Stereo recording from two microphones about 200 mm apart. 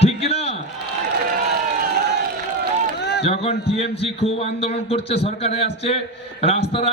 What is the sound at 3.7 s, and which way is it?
A man's voice, 30° left (ahead or behind).